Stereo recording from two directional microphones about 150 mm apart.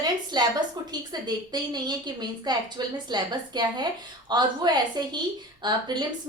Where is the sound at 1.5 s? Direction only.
25° right (ahead or behind).